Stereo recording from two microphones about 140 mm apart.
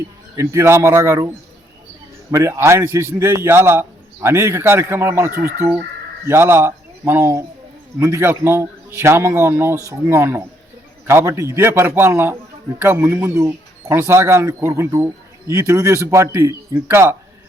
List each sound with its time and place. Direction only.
0.3 s a man's voice: 20° right (ahead or behind)
2.3 s a man's voice: 20° right (ahead or behind)